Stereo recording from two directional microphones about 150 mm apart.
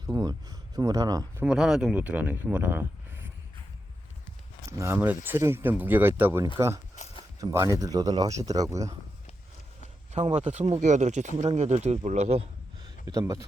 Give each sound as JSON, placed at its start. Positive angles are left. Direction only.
{"t": 0.1, "sound": "speech", "side_deg": -25}
{"t": 1.5, "sound": "speech", "side_deg": -5}
{"t": 4.8, "sound": "speech", "side_deg": -15}
{"t": 7.0, "sound": "a sound", "side_deg": 55}
{"t": 7.3, "sound": "speech", "side_deg": -20}
{"t": 10.1, "sound": "speech", "side_deg": -50}
{"t": 13.1, "sound": "speech", "side_deg": -25}